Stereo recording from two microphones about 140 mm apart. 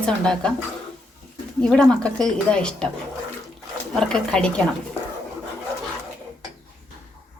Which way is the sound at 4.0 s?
5° left (ahead or behind).